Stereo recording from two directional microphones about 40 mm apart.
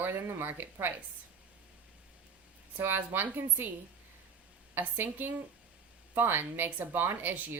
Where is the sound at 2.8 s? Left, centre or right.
Right.